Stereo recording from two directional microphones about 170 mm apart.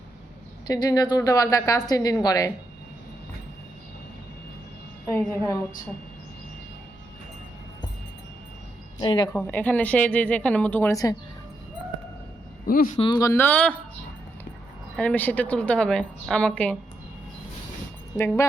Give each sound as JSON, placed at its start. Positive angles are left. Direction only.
{"t": 0.7, "sound": "a woman's voice", "side_deg": 20}
{"t": 5.0, "sound": "a woman's voice", "side_deg": 15}
{"t": 9.0, "sound": "a woman's voice", "side_deg": 25}
{"t": 9.3, "sound": "speech", "side_deg": 10}
{"t": 12.6, "sound": "speech", "side_deg": 55}
{"t": 13.0, "sound": "speech", "side_deg": 25}
{"t": 14.9, "sound": "speech", "side_deg": 10}
{"t": 18.2, "sound": "speech", "side_deg": 15}